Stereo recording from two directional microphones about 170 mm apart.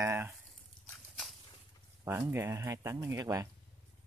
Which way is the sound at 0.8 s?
5° left (ahead or behind).